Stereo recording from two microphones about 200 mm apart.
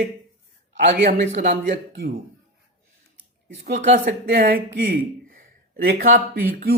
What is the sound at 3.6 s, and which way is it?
Speech, 50° right (ahead or behind).